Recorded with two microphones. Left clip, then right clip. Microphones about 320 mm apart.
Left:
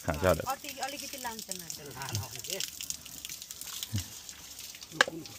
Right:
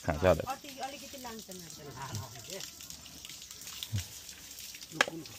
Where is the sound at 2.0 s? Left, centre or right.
Centre.